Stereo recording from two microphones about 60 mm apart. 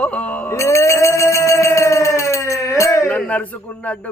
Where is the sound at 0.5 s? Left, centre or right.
Left.